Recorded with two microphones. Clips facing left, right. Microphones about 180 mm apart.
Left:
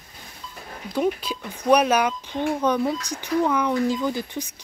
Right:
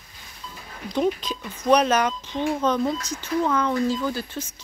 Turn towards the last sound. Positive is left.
turn(degrees=15)  # may be behind; listen again after turning